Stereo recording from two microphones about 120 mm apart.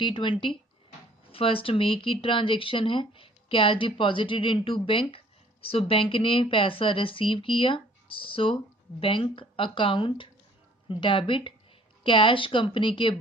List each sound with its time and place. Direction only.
0.0 s speech: 45° left (ahead or behind)